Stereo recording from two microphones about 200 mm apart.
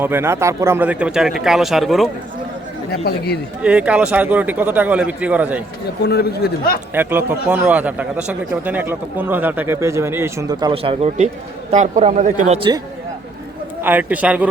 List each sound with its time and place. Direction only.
0.0 s speech: 10° right (ahead or behind)
3.0 s a man's voice: 55° left (ahead or behind)
3.6 s a man's voice: 5° right (ahead or behind)
6.0 s a man's voice: 55° left (ahead or behind)
6.9 s a man's voice: 10° right (ahead or behind); by 12.5 s 35° right (ahead or behind)
12.5 s speech: 25° right (ahead or behind)
13.8 s a man's voice: 10° right (ahead or behind)